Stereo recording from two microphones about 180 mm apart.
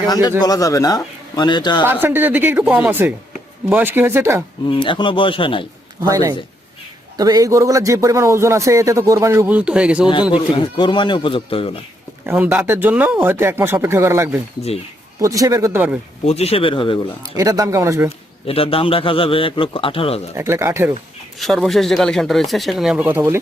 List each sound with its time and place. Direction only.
0.1 s a man's voice: 20° left (ahead or behind)
1.8 s a man's voice: 10° right (ahead or behind)
4.8 s a man's voice: 25° left (ahead or behind)
6.0 s a man's voice: 20° right (ahead or behind)
10.3 s a man's voice: 25° left (ahead or behind)
12.2 s a man's voice: 10° right (ahead or behind)
16.2 s speech: 35° left (ahead or behind)
17.3 s a man's voice: 20° right (ahead or behind)
18.4 s a man's voice: 30° left (ahead or behind)
20.3 s a man's voice: 15° right (ahead or behind)
21.3 s speech: centre (ahead or behind)